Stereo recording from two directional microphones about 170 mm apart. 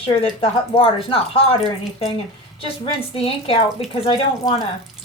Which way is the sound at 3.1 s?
35° left (ahead or behind).